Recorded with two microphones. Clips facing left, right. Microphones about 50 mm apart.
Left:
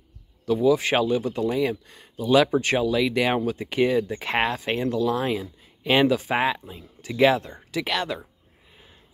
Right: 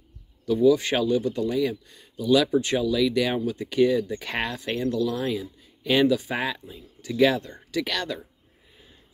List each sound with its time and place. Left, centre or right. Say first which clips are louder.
0.7 s speech: even; left